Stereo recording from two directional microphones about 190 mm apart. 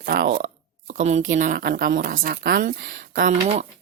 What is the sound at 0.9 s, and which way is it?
Speech, 35° right (ahead or behind).